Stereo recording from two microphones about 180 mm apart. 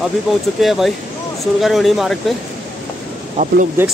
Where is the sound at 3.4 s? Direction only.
50° right (ahead or behind).